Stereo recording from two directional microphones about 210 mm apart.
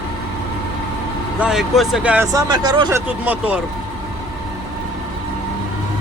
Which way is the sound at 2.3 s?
20° right (ahead or behind).